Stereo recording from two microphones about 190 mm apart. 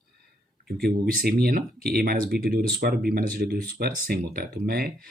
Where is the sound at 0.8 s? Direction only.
50° right (ahead or behind).